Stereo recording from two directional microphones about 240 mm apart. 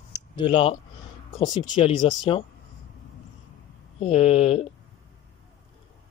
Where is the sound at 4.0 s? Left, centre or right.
Left.